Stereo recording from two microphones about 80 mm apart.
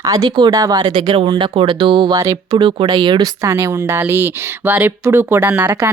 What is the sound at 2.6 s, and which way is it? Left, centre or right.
Speech, right.